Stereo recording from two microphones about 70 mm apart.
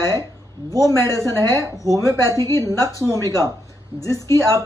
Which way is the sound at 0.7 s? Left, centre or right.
Left.